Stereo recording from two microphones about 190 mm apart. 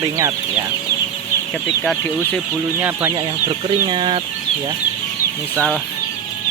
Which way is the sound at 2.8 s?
10° right (ahead or behind).